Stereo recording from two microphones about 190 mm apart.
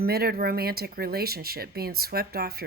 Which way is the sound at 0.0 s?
55° right (ahead or behind).